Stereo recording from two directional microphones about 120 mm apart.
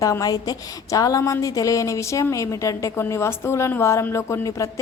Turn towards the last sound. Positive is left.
turn(degrees=25)  # may be behind; listen again after turning